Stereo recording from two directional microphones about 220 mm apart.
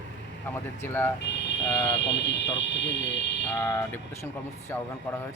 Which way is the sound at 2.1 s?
55° left (ahead or behind).